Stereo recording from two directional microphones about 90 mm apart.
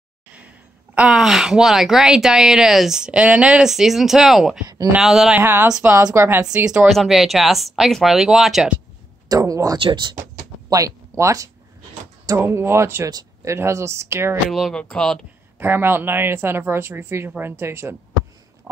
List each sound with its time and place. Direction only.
0.9 s a woman's voice: 10° right (ahead or behind)
5.3 s speech: 25° right (ahead or behind)
6.4 s a woman's voice: 10° right (ahead or behind)
6.9 s a woman's voice: centre (ahead or behind)
9.3 s speech: 40° right (ahead or behind)
9.8 s speech: 65° right (ahead or behind)
10.7 s speech: 35° right (ahead or behind)
14.5 s speech: 5° left (ahead or behind)
15.6 s speech: 25° right (ahead or behind)